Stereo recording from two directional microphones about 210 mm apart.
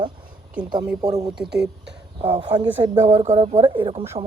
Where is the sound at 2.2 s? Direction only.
20° right (ahead or behind).